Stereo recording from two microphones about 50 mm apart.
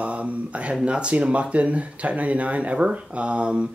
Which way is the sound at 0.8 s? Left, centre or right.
Right.